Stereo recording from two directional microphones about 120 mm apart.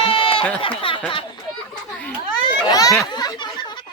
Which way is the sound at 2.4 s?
30° left (ahead or behind).